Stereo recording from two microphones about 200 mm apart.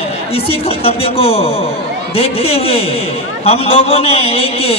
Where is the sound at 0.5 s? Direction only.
30° left (ahead or behind).